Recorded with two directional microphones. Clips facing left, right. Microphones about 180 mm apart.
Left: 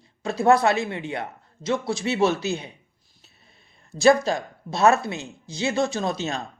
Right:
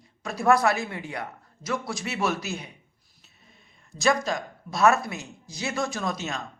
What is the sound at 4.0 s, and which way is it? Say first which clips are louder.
Speech: left 6 dB; 30° left (ahead or behind).